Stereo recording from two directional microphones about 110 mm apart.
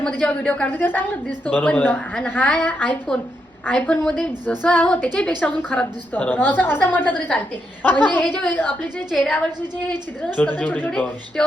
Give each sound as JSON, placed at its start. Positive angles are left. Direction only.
{"t": 0.0, "sound": "a woman's voice", "side_deg": 10}